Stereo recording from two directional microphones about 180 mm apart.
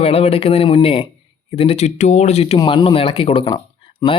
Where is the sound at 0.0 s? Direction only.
35° left (ahead or behind).